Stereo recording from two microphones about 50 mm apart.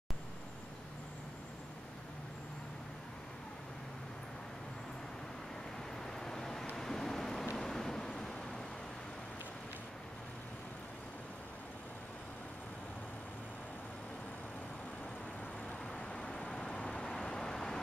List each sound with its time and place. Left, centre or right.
6.1 s vehicle: centre
15.9 s vehicle: left